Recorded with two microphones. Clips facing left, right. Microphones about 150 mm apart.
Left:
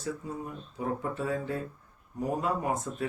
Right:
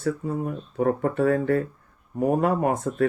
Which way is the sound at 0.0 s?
60° right (ahead or behind).